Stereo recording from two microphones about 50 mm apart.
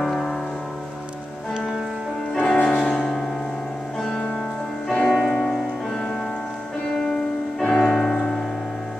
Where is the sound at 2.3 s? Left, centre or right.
Centre.